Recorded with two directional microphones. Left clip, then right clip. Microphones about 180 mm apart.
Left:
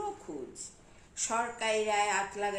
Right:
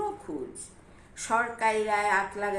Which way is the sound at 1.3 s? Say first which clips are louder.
Right 6 dB; 15° left (ahead or behind).